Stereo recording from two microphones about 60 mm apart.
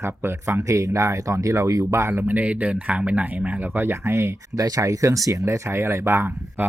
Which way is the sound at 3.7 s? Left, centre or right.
Right.